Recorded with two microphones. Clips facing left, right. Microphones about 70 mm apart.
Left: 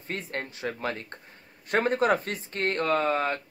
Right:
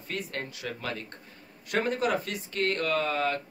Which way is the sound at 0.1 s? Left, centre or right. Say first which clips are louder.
Left 1 dB; left.